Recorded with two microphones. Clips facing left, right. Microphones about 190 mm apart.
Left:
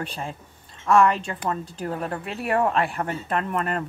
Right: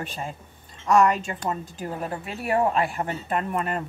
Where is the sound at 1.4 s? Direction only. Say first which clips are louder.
Left 3 dB; 10° right (ahead or behind).